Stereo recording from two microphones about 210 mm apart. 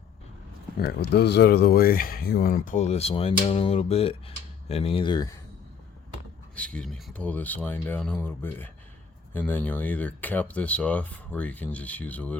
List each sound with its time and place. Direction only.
0.8 s speech: 50° left (ahead or behind); by 5.3 s 20° left (ahead or behind)
6.6 s speech: 5° left (ahead or behind)